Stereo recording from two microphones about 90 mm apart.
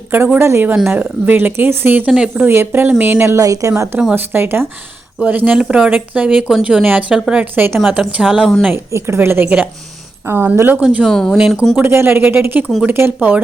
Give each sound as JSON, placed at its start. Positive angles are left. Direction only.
{"t": 0.3, "sound": "a woman's voice", "side_deg": -30}
{"t": 2.5, "sound": "speech", "side_deg": -25}
{"t": 3.3, "sound": "speech", "side_deg": -40}
{"t": 4.1, "sound": "a woman's voice", "side_deg": -25}
{"t": 7.5, "sound": "speech", "side_deg": -25}
{"t": 7.9, "sound": "a woman's voice", "side_deg": -10}
{"t": 8.4, "sound": "speech", "side_deg": 5}
{"t": 8.7, "sound": "speech", "side_deg": -30}
{"t": 10.8, "sound": "a woman's voice", "side_deg": -15}
{"t": 11.0, "sound": "speech", "side_deg": 5}
{"t": 11.3, "sound": "a woman's voice", "side_deg": -5}
{"t": 11.8, "sound": "speech", "side_deg": -25}